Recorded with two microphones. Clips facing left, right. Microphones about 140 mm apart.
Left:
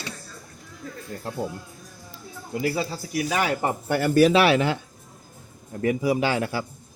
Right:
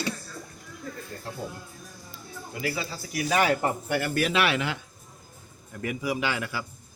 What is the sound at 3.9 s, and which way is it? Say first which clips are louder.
Speech: left 11 dB; 40° left (ahead or behind).